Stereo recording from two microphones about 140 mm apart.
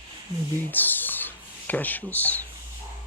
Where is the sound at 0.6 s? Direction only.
15° left (ahead or behind).